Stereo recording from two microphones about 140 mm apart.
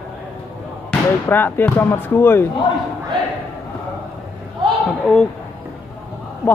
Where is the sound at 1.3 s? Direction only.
15° left (ahead or behind).